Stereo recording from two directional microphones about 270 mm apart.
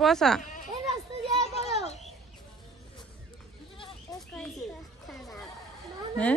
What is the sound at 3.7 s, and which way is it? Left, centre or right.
Goat, centre.